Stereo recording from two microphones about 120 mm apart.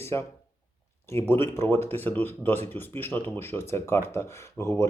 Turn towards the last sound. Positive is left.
turn(degrees=20)  # may be behind; listen again after turning